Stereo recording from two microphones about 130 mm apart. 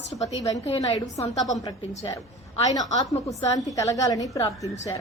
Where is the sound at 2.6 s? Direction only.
30° left (ahead or behind).